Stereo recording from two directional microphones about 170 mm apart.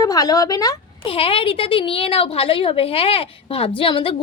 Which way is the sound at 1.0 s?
35° left (ahead or behind).